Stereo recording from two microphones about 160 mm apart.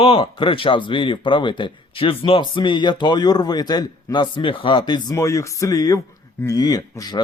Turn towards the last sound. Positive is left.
turn(degrees=25)  # may be behind; listen again after turning